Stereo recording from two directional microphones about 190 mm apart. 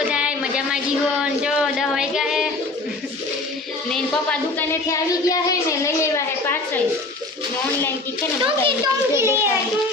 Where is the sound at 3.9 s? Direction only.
5° left (ahead or behind).